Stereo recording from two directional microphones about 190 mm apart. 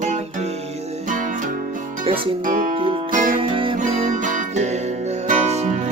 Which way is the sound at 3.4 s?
25° right (ahead or behind).